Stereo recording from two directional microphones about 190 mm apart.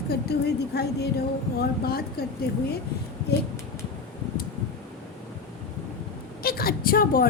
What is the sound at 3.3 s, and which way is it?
Speech, 55° left (ahead or behind).